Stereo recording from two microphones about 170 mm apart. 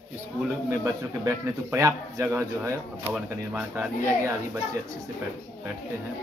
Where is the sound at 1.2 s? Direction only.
15° right (ahead or behind).